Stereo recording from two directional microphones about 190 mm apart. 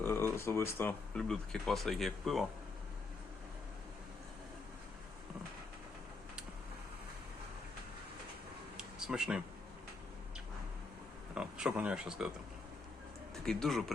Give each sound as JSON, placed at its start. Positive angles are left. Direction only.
{"t": 0.0, "sound": "speech", "side_deg": 10}
{"t": 8.8, "sound": "a sound", "side_deg": -5}
{"t": 11.3, "sound": "speech", "side_deg": -5}
{"t": 13.4, "sound": "speech", "side_deg": 0}